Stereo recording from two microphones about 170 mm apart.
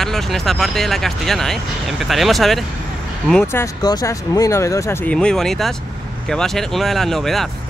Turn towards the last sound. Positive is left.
turn(degrees=0)  # may be behind; listen again after turning